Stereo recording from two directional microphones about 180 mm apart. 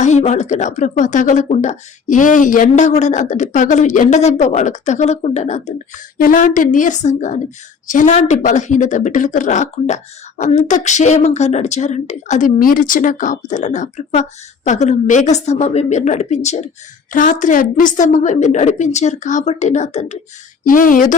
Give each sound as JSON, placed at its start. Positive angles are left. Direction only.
{"t": 0.0, "sound": "a woman's voice", "side_deg": 40}
{"t": 6.1, "sound": "a woman's voice", "side_deg": 50}